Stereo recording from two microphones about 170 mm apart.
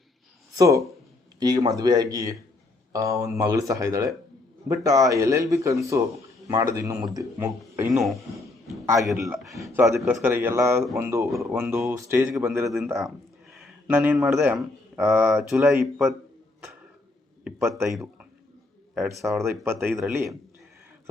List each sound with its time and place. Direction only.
0.5 s a man's voice: 20° right (ahead or behind)
7.9 s a man's voice: centre (ahead or behind)
9.2 s a man's voice: 20° right (ahead or behind)
12.6 s a man's voice: centre (ahead or behind)
17.4 s a man's voice: 5° right (ahead or behind)
19.4 s a man's voice: 15° right (ahead or behind)